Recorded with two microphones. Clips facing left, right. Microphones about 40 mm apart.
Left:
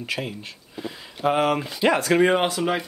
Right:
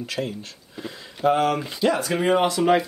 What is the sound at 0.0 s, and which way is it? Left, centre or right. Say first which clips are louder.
Speech: right 1 dB; centre.